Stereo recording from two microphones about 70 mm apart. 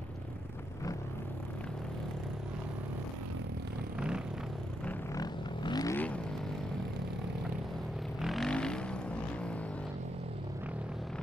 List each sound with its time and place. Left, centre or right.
5.1 s vehicle: left
5.9 s vehicle: centre
8.2 s vehicle: centre
8.5 s vehicle: centre